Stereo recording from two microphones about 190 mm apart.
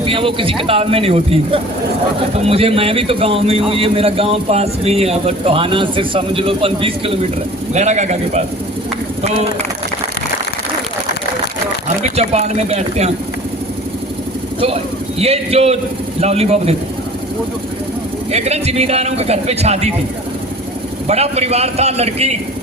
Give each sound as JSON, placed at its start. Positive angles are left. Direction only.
{"t": 0.0, "sound": "a man's voice", "side_deg": -30}
{"t": 12.1, "sound": "speech", "side_deg": -35}
{"t": 15.2, "sound": "speech", "side_deg": -30}
{"t": 18.3, "sound": "speech", "side_deg": -35}
{"t": 21.1, "sound": "speech", "side_deg": -35}